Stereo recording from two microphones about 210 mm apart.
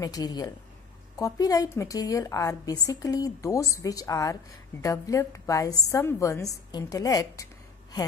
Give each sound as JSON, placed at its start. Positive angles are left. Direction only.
{"t": 0.0, "sound": "a woman's voice", "side_deg": 20}